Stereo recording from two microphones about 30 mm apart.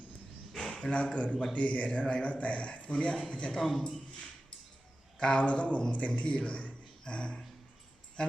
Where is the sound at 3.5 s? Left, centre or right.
Centre.